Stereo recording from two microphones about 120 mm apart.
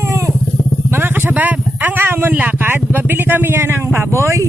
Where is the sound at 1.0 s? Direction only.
15° right (ahead or behind).